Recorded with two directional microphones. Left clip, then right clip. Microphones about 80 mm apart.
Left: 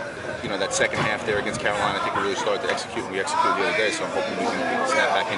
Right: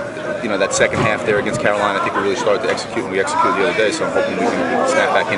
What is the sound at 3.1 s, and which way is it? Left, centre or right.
Speech, centre.